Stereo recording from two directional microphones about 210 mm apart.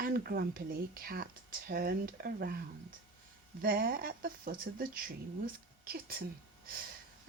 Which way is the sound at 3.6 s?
45° right (ahead or behind).